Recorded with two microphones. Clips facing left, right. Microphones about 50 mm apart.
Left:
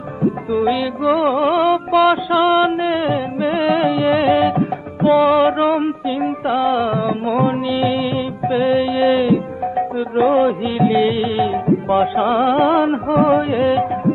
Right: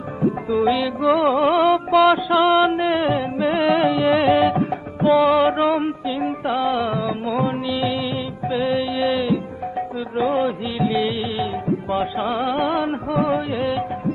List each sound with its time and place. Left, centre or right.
0.2 s music: centre
11.1 s music: left